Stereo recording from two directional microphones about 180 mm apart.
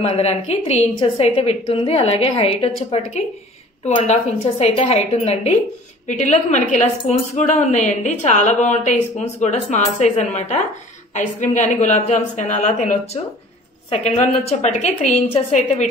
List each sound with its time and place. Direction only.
0.0 s speech: 35° left (ahead or behind)